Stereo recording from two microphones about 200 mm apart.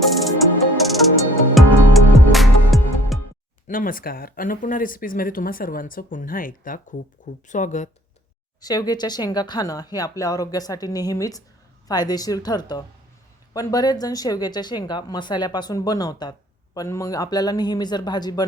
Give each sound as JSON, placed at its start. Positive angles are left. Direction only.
{"t": 0.8, "sound": "music", "side_deg": 0}
{"t": 3.7, "sound": "speech", "side_deg": 45}
{"t": 8.6, "sound": "speech", "side_deg": 20}